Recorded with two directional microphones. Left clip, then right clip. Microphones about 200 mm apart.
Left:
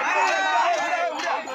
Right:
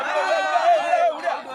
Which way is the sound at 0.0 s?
25° right (ahead or behind).